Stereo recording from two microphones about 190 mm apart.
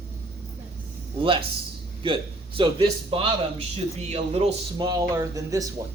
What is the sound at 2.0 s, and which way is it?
A man's voice, 25° right (ahead or behind).